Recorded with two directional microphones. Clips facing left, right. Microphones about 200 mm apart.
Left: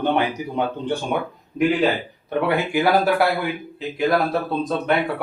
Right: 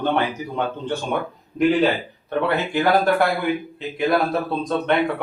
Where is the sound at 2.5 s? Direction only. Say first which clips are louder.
Left 1 dB; 10° left (ahead or behind).